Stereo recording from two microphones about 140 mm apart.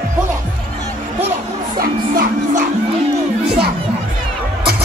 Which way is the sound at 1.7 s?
90° right.